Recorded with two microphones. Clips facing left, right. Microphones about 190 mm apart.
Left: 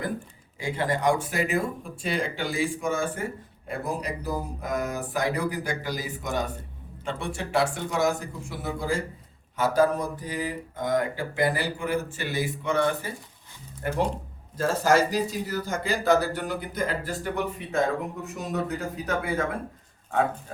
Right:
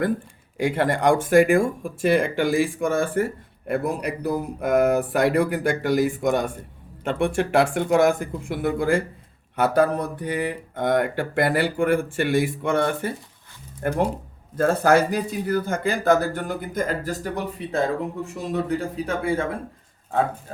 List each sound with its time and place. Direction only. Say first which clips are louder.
0.5 s speech: right 6 dB; 70° right (ahead or behind)
1.1 s speech: right 10 dB; 50° right (ahead or behind)
12.1 s speech: right 9 dB; 70° right (ahead or behind)
12.6 s speech: right 3 dB; 60° right (ahead or behind); by 19.5 s 30° right (ahead or behind)